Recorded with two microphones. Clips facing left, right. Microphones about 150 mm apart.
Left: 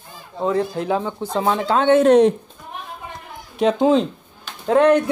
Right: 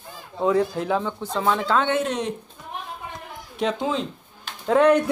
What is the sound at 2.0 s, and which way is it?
Speech, 50° left (ahead or behind).